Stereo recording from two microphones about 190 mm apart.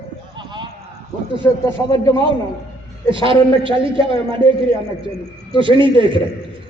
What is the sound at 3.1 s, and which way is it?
A man's voice, 25° right (ahead or behind).